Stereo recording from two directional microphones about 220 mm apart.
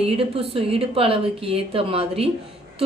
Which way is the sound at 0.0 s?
25° right (ahead or behind).